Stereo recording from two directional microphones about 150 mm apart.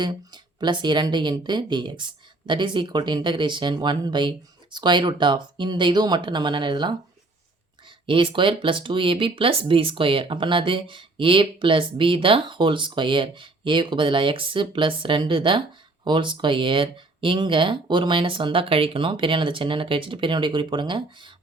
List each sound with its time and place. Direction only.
0.0 s speech: 30° right (ahead or behind)
8.0 s speech: 35° right (ahead or behind)